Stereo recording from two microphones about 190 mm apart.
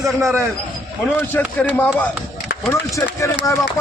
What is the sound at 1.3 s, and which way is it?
Speech, 10° left (ahead or behind).